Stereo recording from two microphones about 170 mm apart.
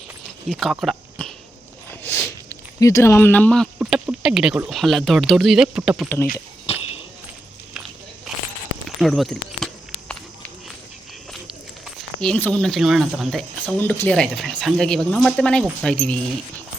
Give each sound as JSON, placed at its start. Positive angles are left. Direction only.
{"t": 0.4, "sound": "speech", "side_deg": 0}
{"t": 1.9, "sound": "a sound", "side_deg": 15}
{"t": 3.8, "sound": "speech", "side_deg": -5}
{"t": 6.7, "sound": "a sound", "side_deg": 35}
{"t": 9.0, "sound": "speech", "side_deg": 0}
{"t": 11.9, "sound": "speech", "side_deg": 5}
{"t": 13.7, "sound": "speech", "side_deg": 10}